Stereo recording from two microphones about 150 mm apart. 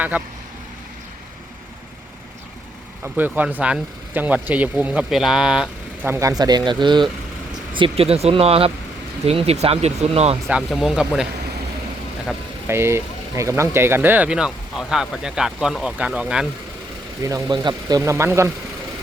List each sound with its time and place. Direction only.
3.0 s speech: 10° right (ahead or behind)
6.1 s speech: 20° right (ahead or behind); by 10.3 s 45° right (ahead or behind)
10.5 s speech: 5° right (ahead or behind)
12.6 s speech: 15° right (ahead or behind)
17.2 s speech: 25° right (ahead or behind)